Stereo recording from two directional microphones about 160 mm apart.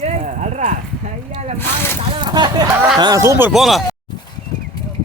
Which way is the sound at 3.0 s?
20° right (ahead or behind).